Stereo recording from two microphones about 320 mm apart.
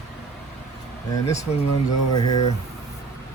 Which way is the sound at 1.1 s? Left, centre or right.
Centre.